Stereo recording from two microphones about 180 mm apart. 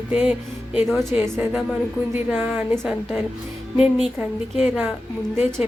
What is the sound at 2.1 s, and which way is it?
A woman's voice, 10° right (ahead or behind).